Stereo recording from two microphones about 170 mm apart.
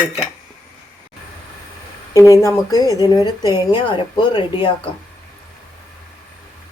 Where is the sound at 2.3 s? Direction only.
15° left (ahead or behind).